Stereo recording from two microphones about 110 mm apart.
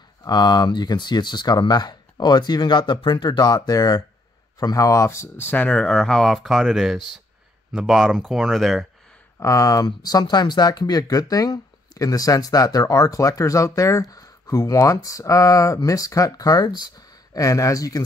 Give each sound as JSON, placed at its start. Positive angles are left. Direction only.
{"t": 0.2, "sound": "speech", "side_deg": 40}
{"t": 9.4, "sound": "speech", "side_deg": 30}